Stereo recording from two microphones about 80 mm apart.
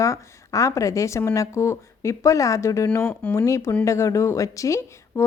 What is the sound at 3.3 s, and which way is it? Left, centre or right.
Speech, left.